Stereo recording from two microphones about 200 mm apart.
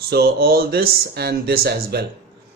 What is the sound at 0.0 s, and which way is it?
Speech, 50° right (ahead or behind).